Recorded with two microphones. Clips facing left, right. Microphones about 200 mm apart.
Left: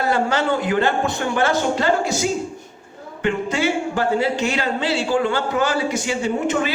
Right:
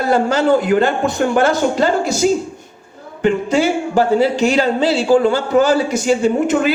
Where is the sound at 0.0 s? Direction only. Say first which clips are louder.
Right 5 dB; 40° right (ahead or behind).